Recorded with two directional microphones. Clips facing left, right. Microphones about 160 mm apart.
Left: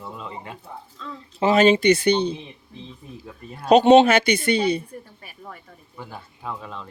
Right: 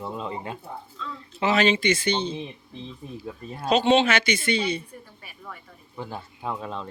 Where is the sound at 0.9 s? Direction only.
45° left (ahead or behind).